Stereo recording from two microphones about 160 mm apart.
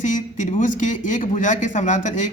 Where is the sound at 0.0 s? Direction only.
50° left (ahead or behind).